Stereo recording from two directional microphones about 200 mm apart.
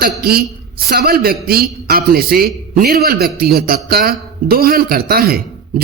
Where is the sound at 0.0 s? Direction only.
50° right (ahead or behind).